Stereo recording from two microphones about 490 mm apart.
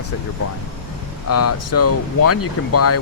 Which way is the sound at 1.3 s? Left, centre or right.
Left.